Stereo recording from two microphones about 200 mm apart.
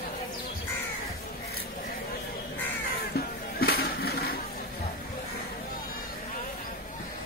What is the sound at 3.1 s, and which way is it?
Music, 50° left (ahead or behind).